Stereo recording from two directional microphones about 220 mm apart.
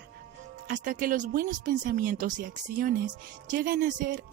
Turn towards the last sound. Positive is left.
turn(degrees=-40)  # may be behind; listen again after turning